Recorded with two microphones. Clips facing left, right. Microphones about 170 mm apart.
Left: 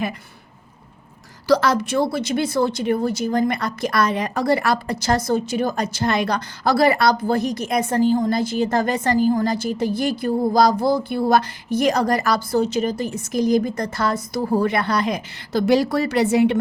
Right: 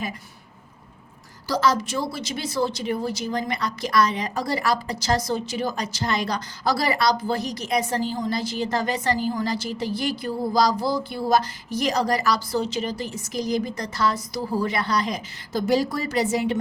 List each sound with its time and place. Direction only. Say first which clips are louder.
1.5 s a woman's voice: left 5 dB; 65° left (ahead or behind)